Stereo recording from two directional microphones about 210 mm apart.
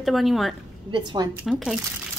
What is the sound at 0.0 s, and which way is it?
Speech, centre (ahead or behind).